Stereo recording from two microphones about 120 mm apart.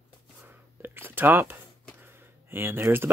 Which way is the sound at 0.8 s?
15° right (ahead or behind).